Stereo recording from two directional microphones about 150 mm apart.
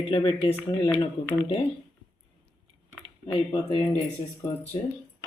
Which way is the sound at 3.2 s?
40° left (ahead or behind).